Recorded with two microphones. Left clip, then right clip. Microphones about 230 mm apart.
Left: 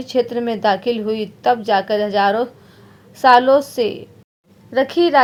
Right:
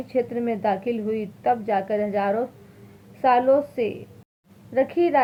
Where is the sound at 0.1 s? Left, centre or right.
Left.